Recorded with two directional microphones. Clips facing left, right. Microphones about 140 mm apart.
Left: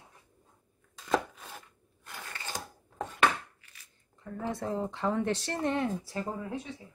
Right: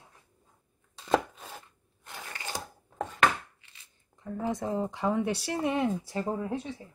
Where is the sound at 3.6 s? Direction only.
25° right (ahead or behind).